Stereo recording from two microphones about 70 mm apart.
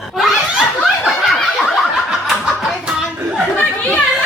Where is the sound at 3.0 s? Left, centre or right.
Centre.